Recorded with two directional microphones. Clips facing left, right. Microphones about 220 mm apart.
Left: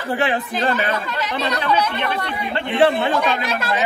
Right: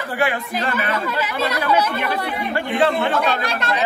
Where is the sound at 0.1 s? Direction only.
25° left (ahead or behind).